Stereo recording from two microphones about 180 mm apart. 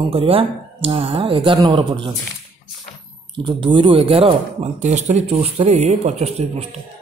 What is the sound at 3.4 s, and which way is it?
Speech, 25° right (ahead or behind).